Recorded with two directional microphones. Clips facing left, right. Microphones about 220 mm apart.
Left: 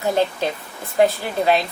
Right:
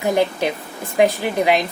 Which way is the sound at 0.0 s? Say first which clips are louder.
Right 2 dB; 15° right (ahead or behind).